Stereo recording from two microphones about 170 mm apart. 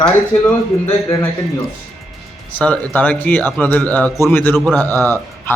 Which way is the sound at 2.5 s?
10° left (ahead or behind).